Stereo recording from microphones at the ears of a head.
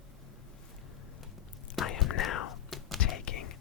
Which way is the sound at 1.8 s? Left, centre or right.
Left.